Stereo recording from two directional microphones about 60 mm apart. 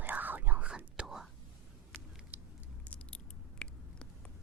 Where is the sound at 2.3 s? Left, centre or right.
Right.